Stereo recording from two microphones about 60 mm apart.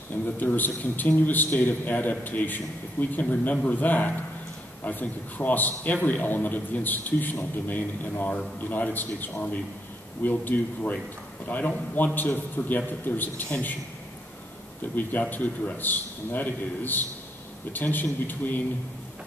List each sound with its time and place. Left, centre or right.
0.2 s a man's voice: left
15.0 s a man's voice: left